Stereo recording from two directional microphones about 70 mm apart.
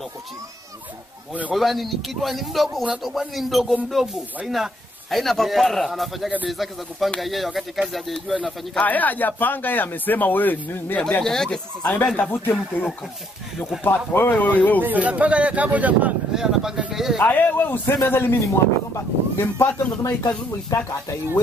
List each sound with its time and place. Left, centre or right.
1.5 s a man's voice: centre
8.7 s speech: left
11.2 s speech: centre
11.8 s speech: left
14.8 s speech: right
16.3 s speech: centre
17.2 s speech: left
20.0 s speech: left